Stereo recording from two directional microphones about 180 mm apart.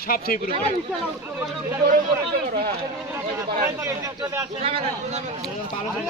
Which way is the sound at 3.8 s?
20° right (ahead or behind).